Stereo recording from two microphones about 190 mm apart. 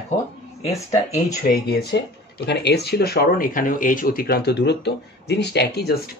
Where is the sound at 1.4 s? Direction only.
55° left (ahead or behind).